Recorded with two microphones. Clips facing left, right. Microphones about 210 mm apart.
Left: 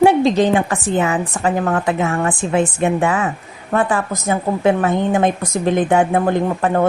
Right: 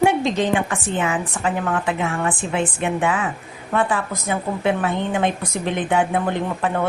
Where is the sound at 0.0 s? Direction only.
35° left (ahead or behind).